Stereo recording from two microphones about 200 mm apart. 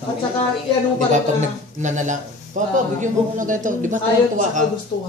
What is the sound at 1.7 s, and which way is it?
Speech, 35° right (ahead or behind).